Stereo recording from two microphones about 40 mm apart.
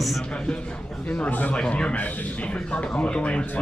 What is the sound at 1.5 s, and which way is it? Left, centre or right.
A man's voice, left.